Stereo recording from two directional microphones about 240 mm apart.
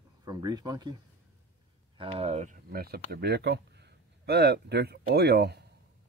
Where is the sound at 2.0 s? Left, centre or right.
Right.